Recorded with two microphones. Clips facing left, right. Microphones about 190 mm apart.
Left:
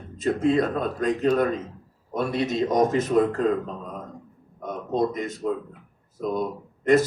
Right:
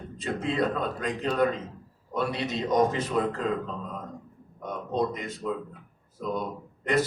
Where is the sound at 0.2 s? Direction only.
45° left (ahead or behind).